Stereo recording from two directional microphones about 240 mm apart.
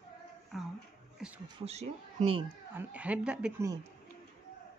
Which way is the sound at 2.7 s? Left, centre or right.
Centre.